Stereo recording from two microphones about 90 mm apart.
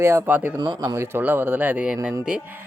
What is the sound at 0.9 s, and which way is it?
Speech, 25° right (ahead or behind).